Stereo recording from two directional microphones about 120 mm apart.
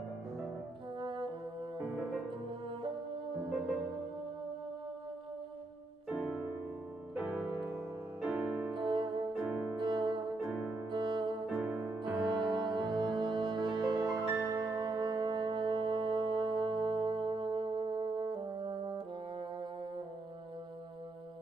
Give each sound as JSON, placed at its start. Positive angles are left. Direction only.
{"t": 0.9, "sound": "french horn", "side_deg": -40}
{"t": 6.0, "sound": "music", "side_deg": -5}
{"t": 8.7, "sound": "music", "side_deg": -40}
{"t": 9.5, "sound": "music", "side_deg": -15}
{"t": 9.8, "sound": "music", "side_deg": -40}
{"t": 11.4, "sound": "music", "side_deg": 0}
{"t": 12.4, "sound": "music", "side_deg": -40}